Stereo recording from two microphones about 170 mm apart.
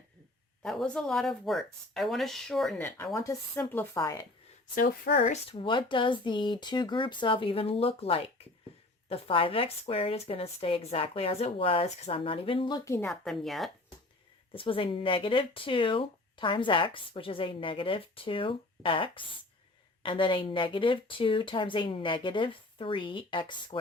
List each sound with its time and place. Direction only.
0.6 s speech: 5° left (ahead or behind)
3.2 s a woman's voice: 15° left (ahead or behind)
4.7 s a woman's voice: 55° left (ahead or behind)
5.5 s a woman's voice: 30° left (ahead or behind)
13.1 s speech: centre (ahead or behind)
14.5 s a woman's voice: 30° left (ahead or behind)